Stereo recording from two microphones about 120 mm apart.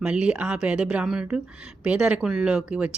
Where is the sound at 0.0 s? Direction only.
10° right (ahead or behind).